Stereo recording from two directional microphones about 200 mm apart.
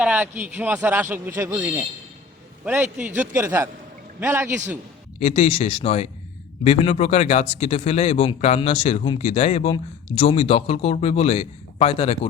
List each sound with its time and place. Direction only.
0.0 s speech: 10° right (ahead or behind)
5.2 s speech: 30° left (ahead or behind)